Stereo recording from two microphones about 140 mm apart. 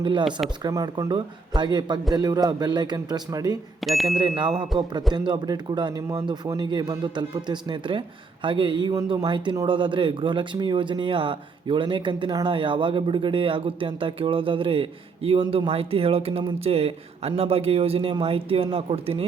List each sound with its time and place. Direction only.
0.0 s speech: 35° right (ahead or behind)
0.3 s speech: 5° right (ahead or behind)
0.6 s a man's voice: 25° right (ahead or behind)
3.8 s speech: centre (ahead or behind)
4.2 s speech: 35° right (ahead or behind)